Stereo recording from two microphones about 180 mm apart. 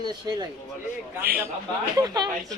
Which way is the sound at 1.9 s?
20° right (ahead or behind).